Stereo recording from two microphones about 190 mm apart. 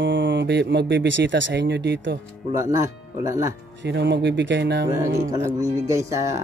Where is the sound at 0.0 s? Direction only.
70° right (ahead or behind).